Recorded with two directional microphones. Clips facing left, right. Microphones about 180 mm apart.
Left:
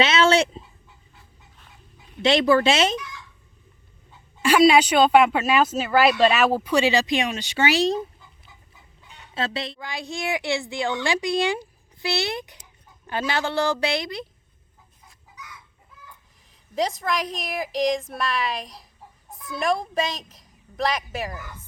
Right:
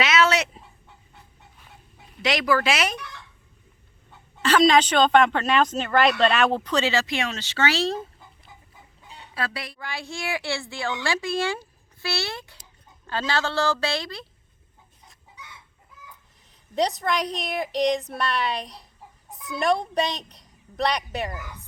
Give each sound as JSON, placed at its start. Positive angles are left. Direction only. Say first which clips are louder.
{"t": 0.0, "sound": "dog", "louder": "left 3 dB", "side_deg": 30}
{"t": 0.9, "sound": "chicken", "louder": "right 2 dB", "side_deg": -60}
{"t": 2.2, "sound": "a woman's voice", "louder": "left 5 dB", "side_deg": 25}
{"t": 3.0, "sound": "a sound", "louder": "left 1 dB", "side_deg": -60}
{"t": 4.4, "sound": "speech", "louder": "left 2 dB", "side_deg": 10}
{"t": 9.3, "sound": "a woman's voice", "louder": "left 3 dB", "side_deg": 25}
{"t": 15.4, "sound": "chicken", "louder": "left 2 dB", "side_deg": -30}
{"t": 16.7, "sound": "a woman's voice", "louder": "right 1 dB", "side_deg": 0}
{"t": 21.3, "sound": "speech", "louder": "even", "side_deg": -10}